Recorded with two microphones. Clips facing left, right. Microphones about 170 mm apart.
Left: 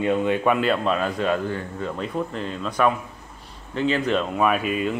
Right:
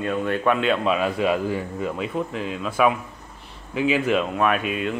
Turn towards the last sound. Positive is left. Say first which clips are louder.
# left 1 dB
turn(degrees=0)  # may be behind; listen again after turning